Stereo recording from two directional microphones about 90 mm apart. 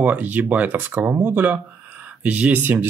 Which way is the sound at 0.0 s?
20° right (ahead or behind).